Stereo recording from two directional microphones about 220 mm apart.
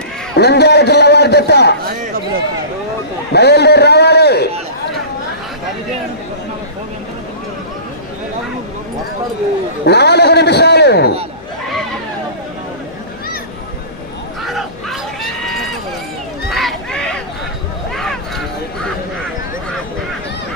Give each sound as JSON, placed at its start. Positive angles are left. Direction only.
{"t": 0.3, "sound": "a man's voice", "side_deg": 50}
{"t": 3.3, "sound": "a man's voice", "side_deg": 50}
{"t": 9.8, "sound": "a man's voice", "side_deg": 50}
{"t": 14.4, "sound": "a sound", "side_deg": 0}
{"t": 15.4, "sound": "run", "side_deg": 0}
{"t": 17.9, "sound": "a sound", "side_deg": 0}